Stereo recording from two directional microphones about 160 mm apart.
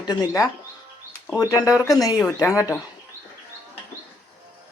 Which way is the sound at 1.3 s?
25° left (ahead or behind).